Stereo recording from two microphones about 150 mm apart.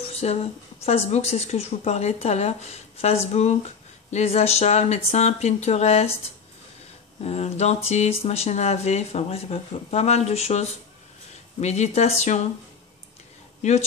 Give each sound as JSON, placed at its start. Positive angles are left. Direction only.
{"t": 0.0, "sound": "speech", "side_deg": 45}
{"t": 7.2, "sound": "speech", "side_deg": 45}
{"t": 13.6, "sound": "speech", "side_deg": 50}